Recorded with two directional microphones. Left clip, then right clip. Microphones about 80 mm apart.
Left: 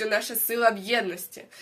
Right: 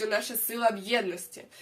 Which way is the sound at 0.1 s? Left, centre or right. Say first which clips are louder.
Left 4 dB; right.